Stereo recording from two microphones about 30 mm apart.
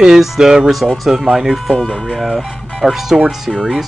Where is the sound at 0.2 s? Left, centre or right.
Centre.